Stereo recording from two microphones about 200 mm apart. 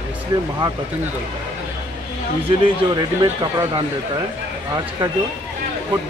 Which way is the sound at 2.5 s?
20° right (ahead or behind).